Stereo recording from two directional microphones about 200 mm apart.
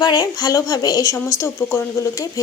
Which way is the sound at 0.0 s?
20° left (ahead or behind).